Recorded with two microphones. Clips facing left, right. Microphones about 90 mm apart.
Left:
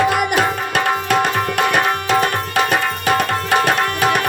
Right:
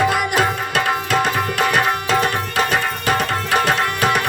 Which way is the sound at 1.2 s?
45° left (ahead or behind).